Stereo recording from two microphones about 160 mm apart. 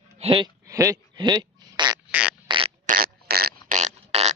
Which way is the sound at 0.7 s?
20° right (ahead or behind).